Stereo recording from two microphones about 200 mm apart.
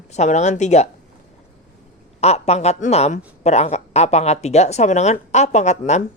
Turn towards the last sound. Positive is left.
turn(degrees=35)  # may be behind; listen again after turning